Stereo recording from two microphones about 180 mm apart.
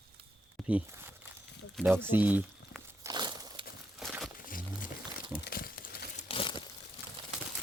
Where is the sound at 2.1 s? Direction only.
10° right (ahead or behind).